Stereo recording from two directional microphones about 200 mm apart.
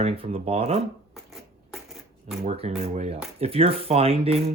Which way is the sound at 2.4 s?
30° right (ahead or behind).